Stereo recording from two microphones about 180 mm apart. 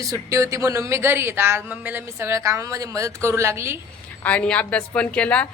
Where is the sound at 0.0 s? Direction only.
15° right (ahead or behind).